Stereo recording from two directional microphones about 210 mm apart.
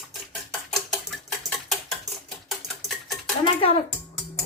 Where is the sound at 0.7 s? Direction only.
Centre (ahead or behind).